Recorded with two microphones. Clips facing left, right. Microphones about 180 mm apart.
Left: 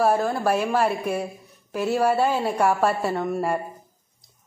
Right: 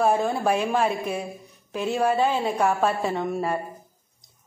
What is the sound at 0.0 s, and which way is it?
A woman's voice, centre (ahead or behind).